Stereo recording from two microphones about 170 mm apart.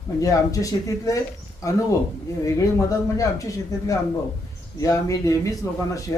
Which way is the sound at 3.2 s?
20° left (ahead or behind).